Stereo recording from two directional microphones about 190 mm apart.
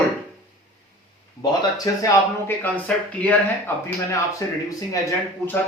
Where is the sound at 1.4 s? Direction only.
20° left (ahead or behind).